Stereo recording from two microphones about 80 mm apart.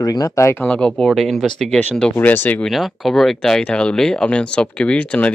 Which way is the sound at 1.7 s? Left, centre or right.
Centre.